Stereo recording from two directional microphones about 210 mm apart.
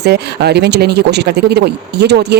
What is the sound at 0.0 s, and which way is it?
Speech, 50° right (ahead or behind).